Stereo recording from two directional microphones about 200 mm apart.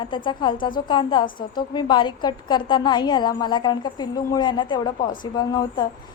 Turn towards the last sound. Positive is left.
turn(degrees=20)  # may be behind; listen again after turning